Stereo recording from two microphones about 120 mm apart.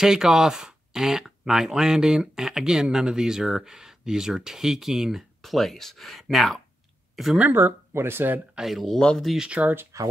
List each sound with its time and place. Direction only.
0.0 s speech: 5° right (ahead or behind)
7.3 s speech: 15° right (ahead or behind)
8.5 s speech: centre (ahead or behind)